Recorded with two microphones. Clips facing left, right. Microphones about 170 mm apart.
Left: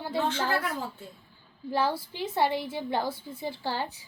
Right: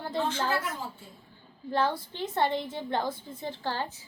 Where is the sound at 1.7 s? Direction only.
5° left (ahead or behind).